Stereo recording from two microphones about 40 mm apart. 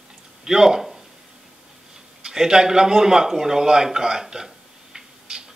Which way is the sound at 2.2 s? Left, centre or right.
Centre.